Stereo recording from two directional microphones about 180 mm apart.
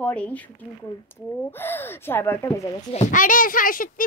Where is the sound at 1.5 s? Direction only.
10° left (ahead or behind).